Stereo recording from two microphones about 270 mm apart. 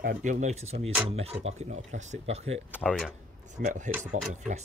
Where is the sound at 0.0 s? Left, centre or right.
Right.